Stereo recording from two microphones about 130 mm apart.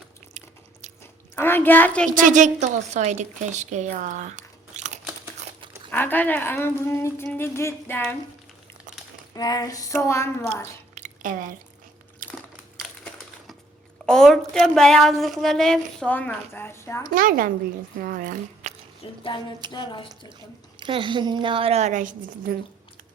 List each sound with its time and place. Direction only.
0.3 s biting: 60° right (ahead or behind)
1.4 s speech: 15° left (ahead or behind)
2.1 s a woman's voice: 75° right (ahead or behind)
5.9 s speech: 15° left (ahead or behind)
9.3 s a sound: 30° left (ahead or behind)
10.9 s squish: 80° right
14.1 s a woman's voice: 5° left (ahead or behind); by 17.1 s 20° left (ahead or behind)
17.1 s a woman's voice: 90° right
19.0 s speech: 40° left (ahead or behind)
20.7 s a woman's voice: 40° right (ahead or behind); by 22.1 s 70° right (ahead or behind)